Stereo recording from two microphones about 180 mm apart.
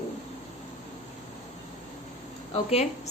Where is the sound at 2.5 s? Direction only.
35° left (ahead or behind).